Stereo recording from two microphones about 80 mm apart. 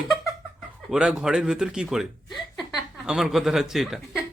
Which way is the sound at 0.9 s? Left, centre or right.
Centre.